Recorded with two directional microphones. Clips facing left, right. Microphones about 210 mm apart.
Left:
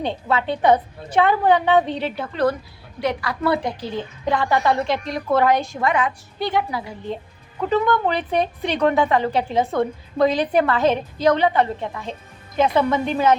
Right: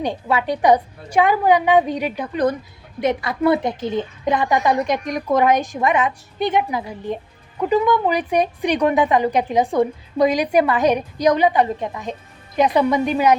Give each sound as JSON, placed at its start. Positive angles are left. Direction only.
{"t": 0.0, "sound": "a woman's voice", "side_deg": -15}